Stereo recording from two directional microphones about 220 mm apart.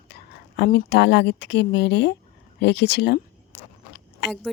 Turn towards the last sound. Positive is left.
turn(degrees=50)  # may be behind; listen again after turning